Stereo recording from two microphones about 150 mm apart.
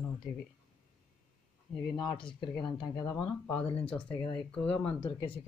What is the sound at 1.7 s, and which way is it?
Speech, 10° left (ahead or behind).